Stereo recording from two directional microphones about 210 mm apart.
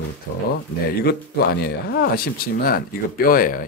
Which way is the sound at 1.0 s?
50° left (ahead or behind).